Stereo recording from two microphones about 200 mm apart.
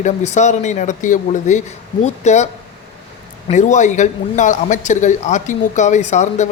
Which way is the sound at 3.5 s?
40° left (ahead or behind).